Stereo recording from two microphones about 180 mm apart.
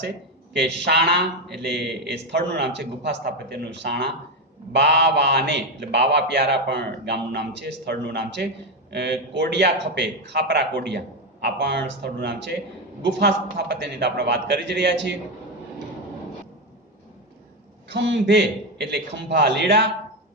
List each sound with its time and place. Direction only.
0.5 s a man's voice: 75° right (ahead or behind)
17.8 s a man's voice: 80° right